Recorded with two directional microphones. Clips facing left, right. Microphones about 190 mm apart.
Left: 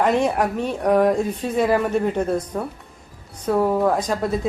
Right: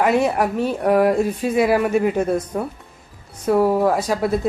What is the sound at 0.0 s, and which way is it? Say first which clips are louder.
Speech: right 1 dB; 5° right (ahead or behind).